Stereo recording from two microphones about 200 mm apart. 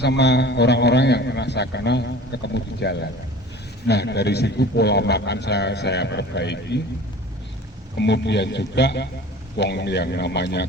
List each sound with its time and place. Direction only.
0.0 s a man's voice: 55° left (ahead or behind)
7.9 s a man's voice: 60° left (ahead or behind)